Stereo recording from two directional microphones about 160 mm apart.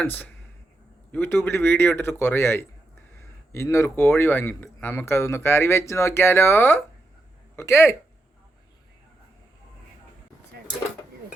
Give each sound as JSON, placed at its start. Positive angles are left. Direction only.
{"t": 0.0, "sound": "speech", "side_deg": 10}